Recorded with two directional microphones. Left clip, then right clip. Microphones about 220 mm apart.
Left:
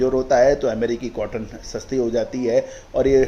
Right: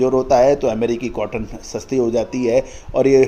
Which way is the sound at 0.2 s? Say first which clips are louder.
Right 2 dB; 45° right (ahead or behind).